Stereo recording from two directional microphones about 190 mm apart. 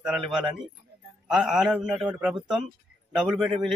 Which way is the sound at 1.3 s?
5° right (ahead or behind).